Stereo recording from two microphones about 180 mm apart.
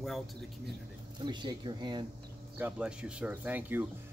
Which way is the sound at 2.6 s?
5° right (ahead or behind).